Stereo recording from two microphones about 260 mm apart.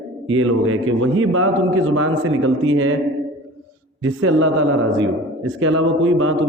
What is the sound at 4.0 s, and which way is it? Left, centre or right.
Speech, right.